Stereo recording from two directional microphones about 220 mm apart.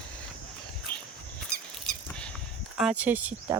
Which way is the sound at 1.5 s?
50° left (ahead or behind).